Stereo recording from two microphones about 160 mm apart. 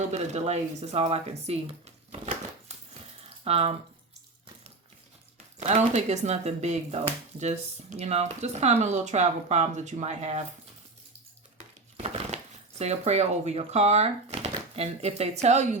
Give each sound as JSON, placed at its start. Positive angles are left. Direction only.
{"t": 0.1, "sound": "speech", "side_deg": -45}
{"t": 3.4, "sound": "speech", "side_deg": -40}
{"t": 5.5, "sound": "speech", "side_deg": -45}
{"t": 11.9, "sound": "crumpling", "side_deg": -40}
{"t": 12.8, "sound": "speech", "side_deg": -40}